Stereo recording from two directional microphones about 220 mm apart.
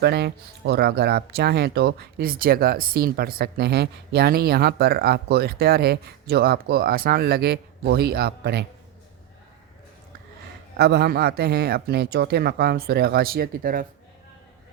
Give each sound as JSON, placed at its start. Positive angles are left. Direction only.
{"t": 0.0, "sound": "speech", "side_deg": -50}
{"t": 10.8, "sound": "speech", "side_deg": -50}